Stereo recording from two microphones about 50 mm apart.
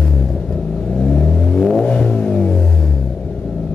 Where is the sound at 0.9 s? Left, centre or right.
Centre.